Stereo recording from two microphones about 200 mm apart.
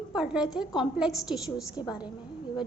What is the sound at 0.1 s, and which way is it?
A woman's voice, 5° right (ahead or behind).